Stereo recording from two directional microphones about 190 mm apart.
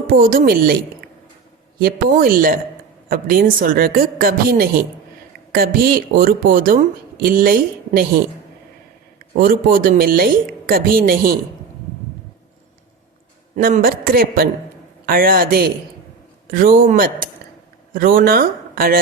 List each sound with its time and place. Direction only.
0.1 s speech: 45° right (ahead or behind)
13.6 s speech: 50° right (ahead or behind)